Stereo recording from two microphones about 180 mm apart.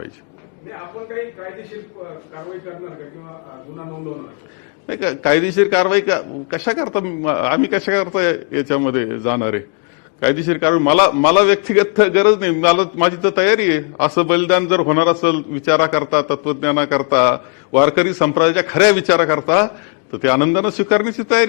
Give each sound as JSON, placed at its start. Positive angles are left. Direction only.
{"t": 0.7, "sound": "a man's voice", "side_deg": 20}
{"t": 4.9, "sound": "a man's voice", "side_deg": 15}